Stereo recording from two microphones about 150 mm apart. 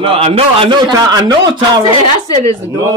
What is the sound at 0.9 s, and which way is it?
Speech, 25° right (ahead or behind).